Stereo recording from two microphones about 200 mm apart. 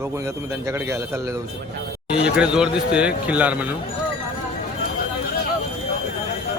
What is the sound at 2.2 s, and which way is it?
Speech, 5° right (ahead or behind).